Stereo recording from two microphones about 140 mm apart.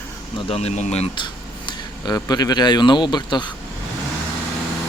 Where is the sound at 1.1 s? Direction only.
35° left (ahead or behind).